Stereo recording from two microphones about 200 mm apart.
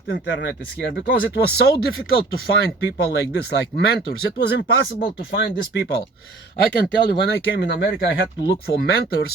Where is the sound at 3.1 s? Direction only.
55° left (ahead or behind).